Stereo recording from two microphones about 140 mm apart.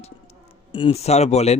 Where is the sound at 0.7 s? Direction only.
40° left (ahead or behind).